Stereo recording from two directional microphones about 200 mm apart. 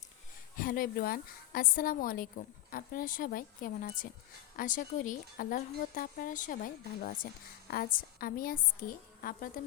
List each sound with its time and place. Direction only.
0.6 s a woman's voice: 45° left (ahead or behind)